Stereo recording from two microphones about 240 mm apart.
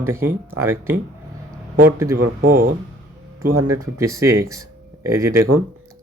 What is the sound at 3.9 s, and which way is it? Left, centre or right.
Speech, centre.